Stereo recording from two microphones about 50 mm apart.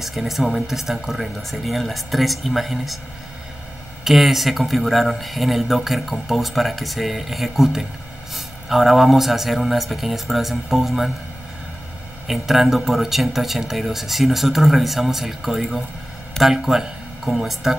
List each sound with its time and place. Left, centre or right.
0.0 s speech: centre
4.0 s speech: centre
12.3 s speech: centre